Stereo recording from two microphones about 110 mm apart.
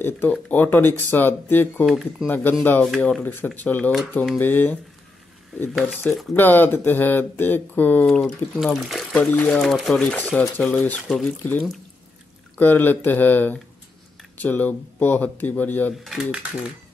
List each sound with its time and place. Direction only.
0.0 s speech: 15° left (ahead or behind)
1.9 s speech: centre (ahead or behind)
2.2 s speech: 15° left (ahead or behind)
5.8 s speech: centre (ahead or behind)
6.3 s speech: 20° left (ahead or behind)
9.6 s speech: centre (ahead or behind)
12.5 s speech: 15° left (ahead or behind)
16.0 s speech: 5° right (ahead or behind)